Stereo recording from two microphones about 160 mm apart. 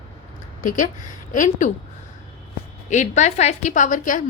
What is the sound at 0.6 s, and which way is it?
A woman's voice, 55° left (ahead or behind).